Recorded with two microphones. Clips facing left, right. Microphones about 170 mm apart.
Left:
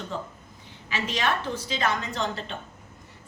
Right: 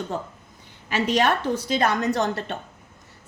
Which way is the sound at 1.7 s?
45° right (ahead or behind).